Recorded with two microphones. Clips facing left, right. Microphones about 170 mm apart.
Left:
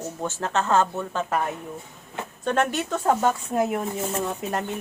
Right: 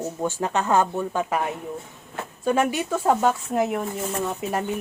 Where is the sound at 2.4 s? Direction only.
10° right (ahead or behind).